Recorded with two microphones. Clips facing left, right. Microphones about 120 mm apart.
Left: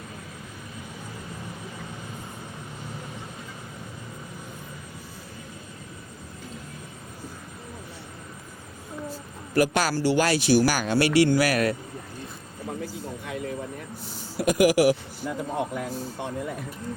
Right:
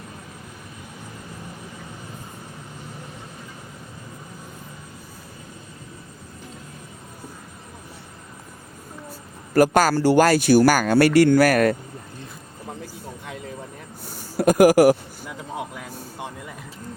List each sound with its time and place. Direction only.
9.6 s speech: 45° right (ahead or behind)
14.0 s speech: 50° right (ahead or behind)
15.5 s speech: 5° right (ahead or behind)